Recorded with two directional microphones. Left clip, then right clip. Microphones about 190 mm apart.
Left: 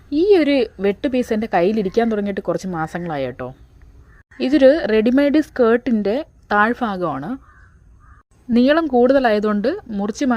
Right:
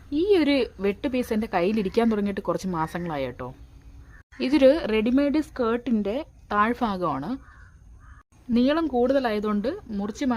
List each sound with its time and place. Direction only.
0.1 s a woman's voice: 25° left (ahead or behind)
8.5 s a woman's voice: 30° left (ahead or behind)